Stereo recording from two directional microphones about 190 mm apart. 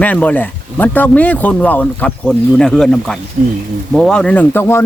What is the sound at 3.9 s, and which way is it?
Speech, centre (ahead or behind).